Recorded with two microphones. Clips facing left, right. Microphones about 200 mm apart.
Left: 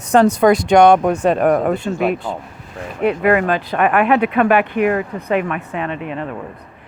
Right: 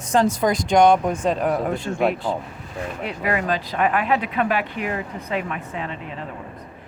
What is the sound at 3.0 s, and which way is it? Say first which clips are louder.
Speech: left 10 dB; 60° left (ahead or behind).